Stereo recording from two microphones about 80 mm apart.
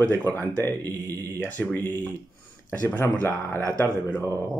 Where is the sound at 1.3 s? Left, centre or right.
Left.